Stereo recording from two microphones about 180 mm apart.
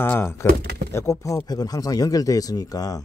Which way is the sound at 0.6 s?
60° right (ahead or behind).